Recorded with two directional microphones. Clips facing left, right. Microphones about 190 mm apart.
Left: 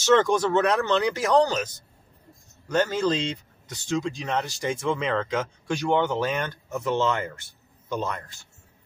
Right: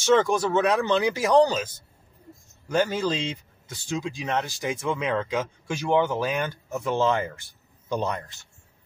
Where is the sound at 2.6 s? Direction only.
10° right (ahead or behind).